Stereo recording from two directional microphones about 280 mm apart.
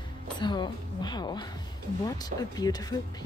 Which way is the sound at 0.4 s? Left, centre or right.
Centre.